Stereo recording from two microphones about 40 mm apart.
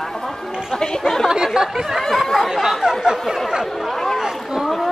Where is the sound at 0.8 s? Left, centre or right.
Centre.